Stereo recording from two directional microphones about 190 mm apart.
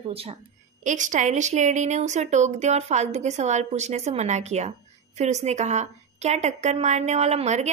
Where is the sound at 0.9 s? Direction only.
40° right (ahead or behind).